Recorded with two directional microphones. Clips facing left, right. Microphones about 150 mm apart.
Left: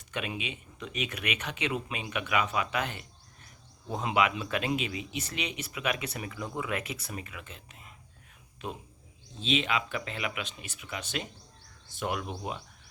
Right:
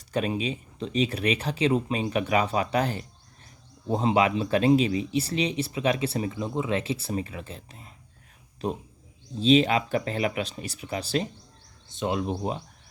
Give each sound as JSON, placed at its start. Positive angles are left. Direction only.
{"t": 0.1, "sound": "speech", "side_deg": -35}
{"t": 11.9, "sound": "speech", "side_deg": -20}